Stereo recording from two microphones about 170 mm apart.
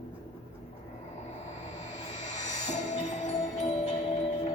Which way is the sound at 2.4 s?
45° left (ahead or behind).